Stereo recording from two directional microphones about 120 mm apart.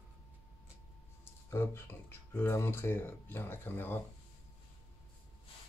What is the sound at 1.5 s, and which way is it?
Speech, 20° left (ahead or behind).